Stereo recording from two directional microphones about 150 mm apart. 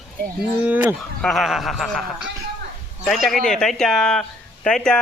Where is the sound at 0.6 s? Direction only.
10° right (ahead or behind).